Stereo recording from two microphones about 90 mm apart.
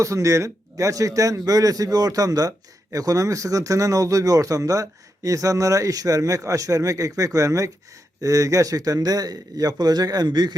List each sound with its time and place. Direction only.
0.0 s a man's voice: 35° right (ahead or behind); by 10.5 s 50° right (ahead or behind)